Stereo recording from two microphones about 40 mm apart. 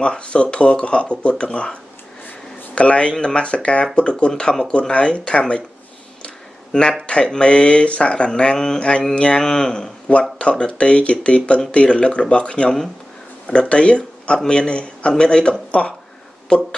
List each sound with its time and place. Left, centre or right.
0.0 s speech: left
9.4 s speech: centre